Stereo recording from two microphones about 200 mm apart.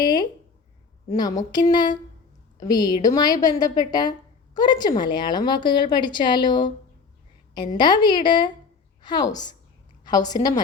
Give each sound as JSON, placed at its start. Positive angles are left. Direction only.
{"t": 0.0, "sound": "a sound", "side_deg": 20}
{"t": 1.1, "sound": "a woman's voice", "side_deg": 20}
{"t": 7.8, "sound": "a woman's voice", "side_deg": 20}